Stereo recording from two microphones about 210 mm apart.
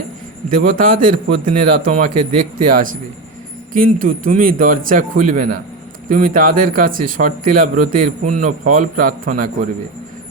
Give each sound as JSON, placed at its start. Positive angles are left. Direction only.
{"t": 0.5, "sound": "speech", "side_deg": -40}